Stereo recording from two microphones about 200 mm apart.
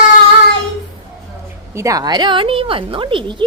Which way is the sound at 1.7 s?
15° right (ahead or behind).